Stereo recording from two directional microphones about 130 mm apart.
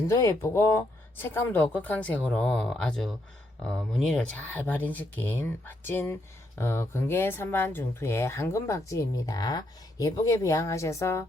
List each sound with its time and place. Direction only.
0.1 s speech: 20° left (ahead or behind)